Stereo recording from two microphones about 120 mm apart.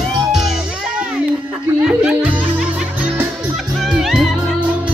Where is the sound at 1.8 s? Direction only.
5° right (ahead or behind).